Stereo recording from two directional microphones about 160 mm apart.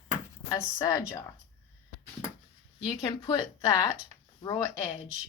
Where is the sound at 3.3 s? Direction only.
20° left (ahead or behind).